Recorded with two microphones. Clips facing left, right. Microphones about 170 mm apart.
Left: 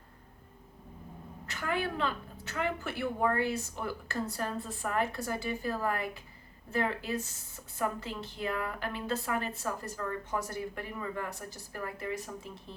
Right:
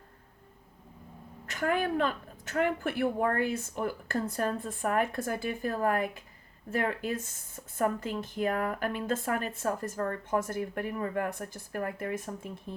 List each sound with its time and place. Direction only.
1.5 s speech: 50° right (ahead or behind)